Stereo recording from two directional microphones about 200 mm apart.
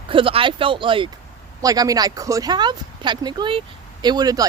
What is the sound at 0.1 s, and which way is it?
Speech, 25° right (ahead or behind).